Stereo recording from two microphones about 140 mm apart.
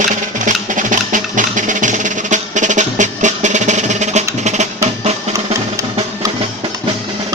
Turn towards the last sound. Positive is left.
turn(degrees=-55)  # may be behind; listen again after turning